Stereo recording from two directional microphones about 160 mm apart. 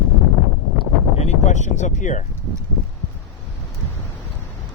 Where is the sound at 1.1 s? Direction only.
45° left (ahead or behind).